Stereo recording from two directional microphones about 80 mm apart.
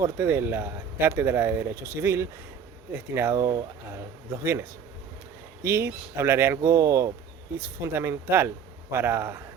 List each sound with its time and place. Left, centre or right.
0.0 s speech: right
3.3 s speech: right
5.6 s speech: right
7.5 s speech: right